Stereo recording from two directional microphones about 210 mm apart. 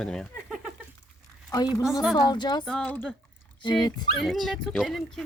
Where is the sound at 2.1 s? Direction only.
20° left (ahead or behind).